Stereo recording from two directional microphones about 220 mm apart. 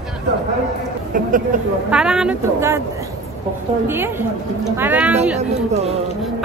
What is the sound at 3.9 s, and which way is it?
A woman's voice, 10° right (ahead or behind).